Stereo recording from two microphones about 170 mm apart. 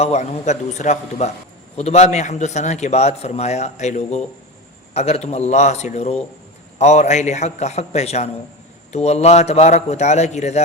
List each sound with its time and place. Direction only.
0.0 s a man's voice: 40° left (ahead or behind)